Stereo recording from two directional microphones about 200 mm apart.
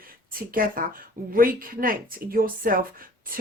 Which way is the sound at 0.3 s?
45° right (ahead or behind).